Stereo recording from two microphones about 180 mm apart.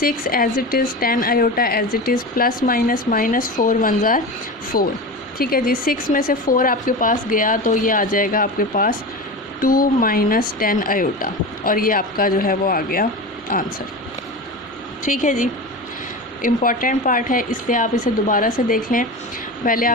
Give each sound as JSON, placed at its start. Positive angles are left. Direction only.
{"t": 0.0, "sound": "speech", "side_deg": 55}
{"t": 15.0, "sound": "speech", "side_deg": 45}